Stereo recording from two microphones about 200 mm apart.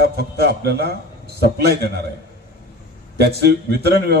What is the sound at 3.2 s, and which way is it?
Speech, 55° right (ahead or behind).